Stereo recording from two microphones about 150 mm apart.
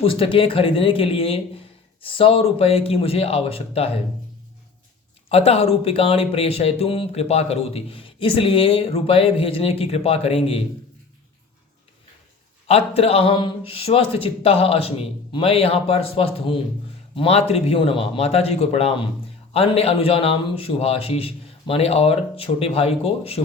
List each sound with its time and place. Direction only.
0.0 s speech: 35° left (ahead or behind)
5.3 s speech: 40° left (ahead or behind)
12.6 s speech: 40° left (ahead or behind)